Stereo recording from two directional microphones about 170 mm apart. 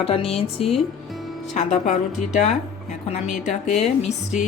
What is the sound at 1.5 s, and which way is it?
Speech, 45° left (ahead or behind).